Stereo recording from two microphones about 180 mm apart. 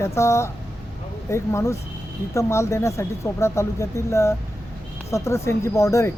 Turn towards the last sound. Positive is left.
turn(degrees=15)  # may be behind; listen again after turning